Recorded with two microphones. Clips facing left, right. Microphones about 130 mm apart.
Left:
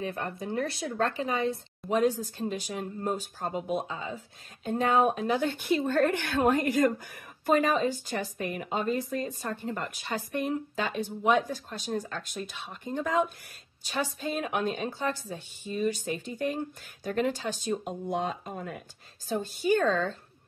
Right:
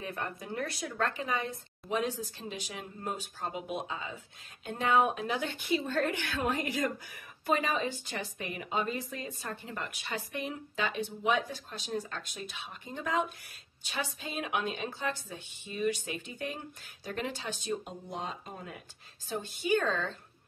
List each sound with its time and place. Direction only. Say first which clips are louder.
0.0 s a woman's voice: left 5 dB; 30° left (ahead or behind)
1.9 s a woman's voice: left 7 dB; 45° left (ahead or behind)
19.2 s a woman's voice: left 6 dB; 40° left (ahead or behind)